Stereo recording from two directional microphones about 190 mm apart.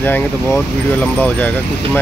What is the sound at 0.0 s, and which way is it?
Speech, 10° left (ahead or behind).